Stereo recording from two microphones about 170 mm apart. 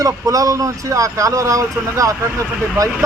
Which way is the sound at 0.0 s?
20° right (ahead or behind).